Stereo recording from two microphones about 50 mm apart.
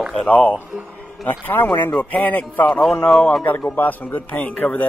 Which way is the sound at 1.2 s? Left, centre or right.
Left.